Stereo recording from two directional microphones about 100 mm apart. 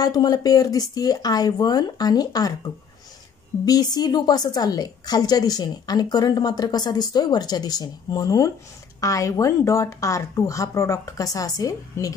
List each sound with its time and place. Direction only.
0.0 s a woman's voice: 40° left (ahead or behind)
3.6 s a woman's voice: 40° left (ahead or behind)